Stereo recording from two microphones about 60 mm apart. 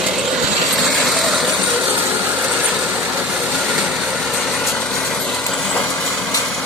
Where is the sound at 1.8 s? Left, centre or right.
Right.